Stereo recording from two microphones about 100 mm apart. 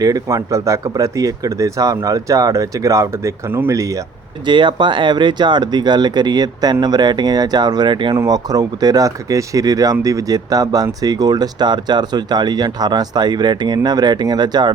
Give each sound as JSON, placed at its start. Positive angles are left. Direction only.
{"t": 0.0, "sound": "speech", "side_deg": -40}
{"t": 4.4, "sound": "speech", "side_deg": -50}
{"t": 8.1, "sound": "speech", "side_deg": -35}